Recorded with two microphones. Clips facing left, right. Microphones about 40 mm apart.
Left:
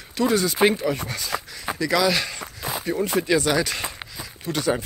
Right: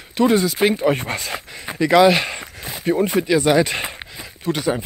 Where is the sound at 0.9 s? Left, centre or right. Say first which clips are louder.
Right 6 dB; right.